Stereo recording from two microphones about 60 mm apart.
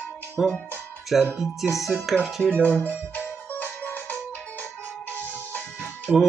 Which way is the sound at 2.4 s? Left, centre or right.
Centre.